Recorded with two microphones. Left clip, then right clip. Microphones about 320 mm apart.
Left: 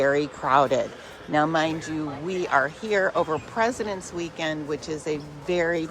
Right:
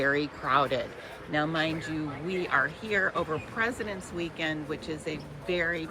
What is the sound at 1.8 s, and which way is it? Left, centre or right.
Speech, left.